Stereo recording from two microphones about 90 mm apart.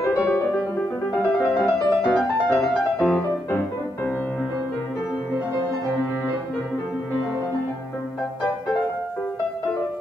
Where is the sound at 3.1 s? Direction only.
25° left (ahead or behind).